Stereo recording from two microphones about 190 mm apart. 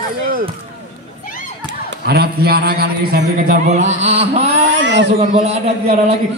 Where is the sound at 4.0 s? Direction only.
35° right (ahead or behind).